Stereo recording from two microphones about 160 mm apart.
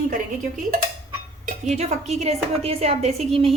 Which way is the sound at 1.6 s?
45° right (ahead or behind).